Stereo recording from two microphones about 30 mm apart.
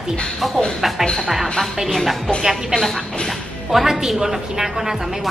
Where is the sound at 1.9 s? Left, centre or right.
Centre.